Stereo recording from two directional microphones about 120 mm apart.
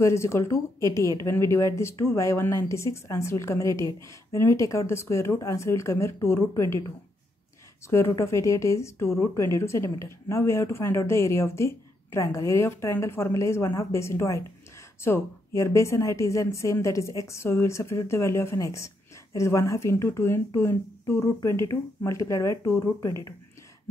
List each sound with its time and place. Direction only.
0.0 s speech: 20° left (ahead or behind)
7.9 s speech: 20° left (ahead or behind)